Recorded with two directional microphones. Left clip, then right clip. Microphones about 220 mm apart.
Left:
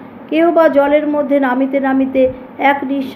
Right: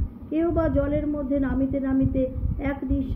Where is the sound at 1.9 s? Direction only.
5° right (ahead or behind).